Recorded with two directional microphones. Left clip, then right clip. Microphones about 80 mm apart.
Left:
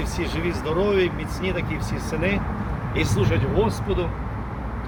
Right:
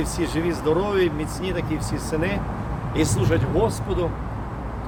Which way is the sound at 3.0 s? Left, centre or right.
Right.